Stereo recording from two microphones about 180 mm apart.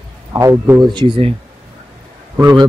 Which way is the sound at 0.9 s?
30° right (ahead or behind).